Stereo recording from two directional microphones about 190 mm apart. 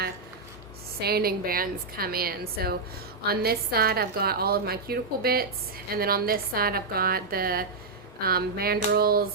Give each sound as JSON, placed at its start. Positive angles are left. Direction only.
{"t": 0.9, "sound": "a woman's voice", "side_deg": -55}